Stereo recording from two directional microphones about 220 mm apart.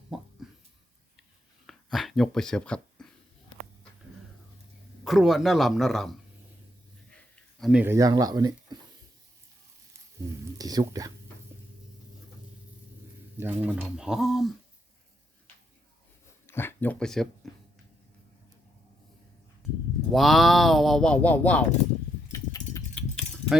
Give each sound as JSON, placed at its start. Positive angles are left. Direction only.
{"t": 0.1, "sound": "a sound", "side_deg": 0}
{"t": 1.6, "sound": "a sound", "side_deg": 0}
{"t": 5.0, "sound": "speech", "side_deg": 0}
{"t": 7.6, "sound": "speech", "side_deg": -5}
{"t": 10.6, "sound": "speech", "side_deg": -15}
{"t": 13.4, "sound": "speech", "side_deg": -10}
{"t": 16.5, "sound": "speech", "side_deg": 10}
{"t": 20.1, "sound": "speech", "side_deg": 0}
{"t": 22.3, "sound": "a sound", "side_deg": 15}